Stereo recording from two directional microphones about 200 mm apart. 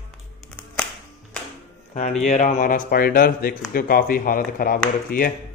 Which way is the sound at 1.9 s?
40° left (ahead or behind).